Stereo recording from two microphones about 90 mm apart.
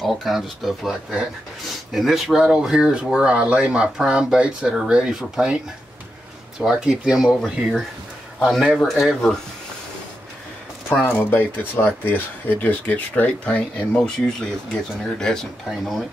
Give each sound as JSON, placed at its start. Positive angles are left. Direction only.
{"t": 0.0, "sound": "speech", "side_deg": 0}
{"t": 6.6, "sound": "speech", "side_deg": -10}
{"t": 10.9, "sound": "speech", "side_deg": 20}